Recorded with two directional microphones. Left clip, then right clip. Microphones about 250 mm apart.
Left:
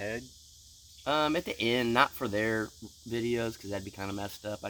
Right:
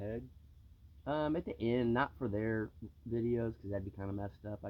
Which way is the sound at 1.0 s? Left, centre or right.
Centre.